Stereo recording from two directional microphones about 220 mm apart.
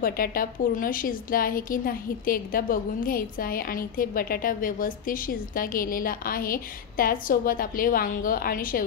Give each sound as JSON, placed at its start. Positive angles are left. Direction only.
{"t": 0.0, "sound": "a woman's voice", "side_deg": 40}